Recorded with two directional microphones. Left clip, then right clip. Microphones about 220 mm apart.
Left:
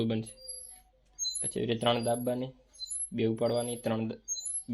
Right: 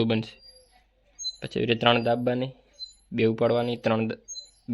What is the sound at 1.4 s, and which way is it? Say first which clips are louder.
Speech: right 8 dB; 40° right (ahead or behind).